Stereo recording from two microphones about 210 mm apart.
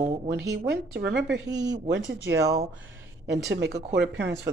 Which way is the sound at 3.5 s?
55° right (ahead or behind).